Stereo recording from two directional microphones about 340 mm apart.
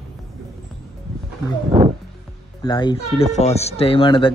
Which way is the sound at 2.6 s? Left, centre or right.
Centre.